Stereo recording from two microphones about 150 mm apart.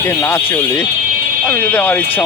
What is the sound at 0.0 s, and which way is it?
Speech, 20° left (ahead or behind).